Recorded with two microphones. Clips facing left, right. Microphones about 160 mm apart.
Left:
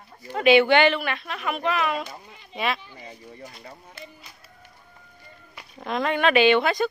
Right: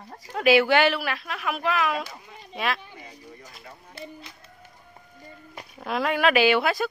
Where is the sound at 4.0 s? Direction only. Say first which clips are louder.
Right 6 dB; 35° right (ahead or behind).